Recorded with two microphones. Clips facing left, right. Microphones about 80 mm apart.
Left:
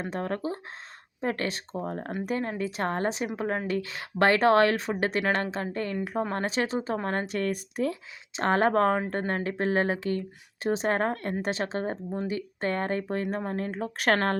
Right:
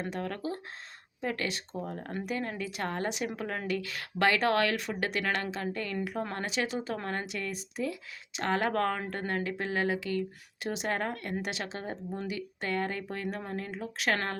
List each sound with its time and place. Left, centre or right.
0.1 s speech: left
8.3 s a woman's voice: left